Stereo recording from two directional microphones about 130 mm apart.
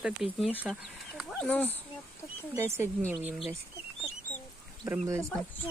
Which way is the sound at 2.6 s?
20° right (ahead or behind).